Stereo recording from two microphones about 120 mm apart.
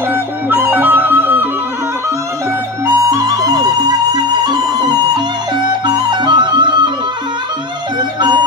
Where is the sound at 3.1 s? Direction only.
25° right (ahead or behind).